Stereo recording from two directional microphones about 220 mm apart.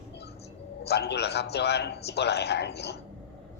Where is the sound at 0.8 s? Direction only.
50° left (ahead or behind).